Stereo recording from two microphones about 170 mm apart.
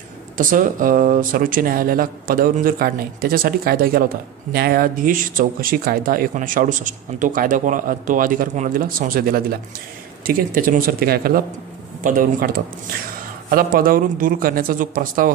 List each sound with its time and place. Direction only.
0.4 s speech: 50° right (ahead or behind)